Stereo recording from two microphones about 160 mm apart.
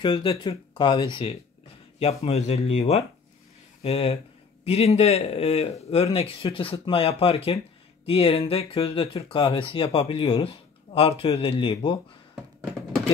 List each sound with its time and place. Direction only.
0.0 s speech: 30° left (ahead or behind)
2.2 s speech: 45° left (ahead or behind)